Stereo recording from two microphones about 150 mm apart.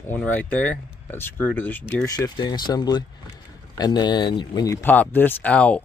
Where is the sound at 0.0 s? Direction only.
10° left (ahead or behind).